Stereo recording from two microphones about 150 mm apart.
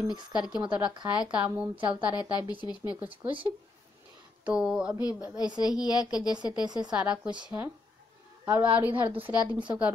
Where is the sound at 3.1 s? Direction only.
35° right (ahead or behind).